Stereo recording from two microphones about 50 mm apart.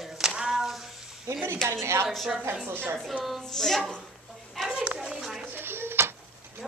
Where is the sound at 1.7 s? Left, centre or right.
Right.